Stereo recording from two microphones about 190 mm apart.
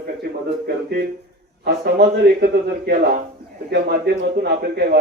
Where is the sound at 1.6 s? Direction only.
60° right (ahead or behind).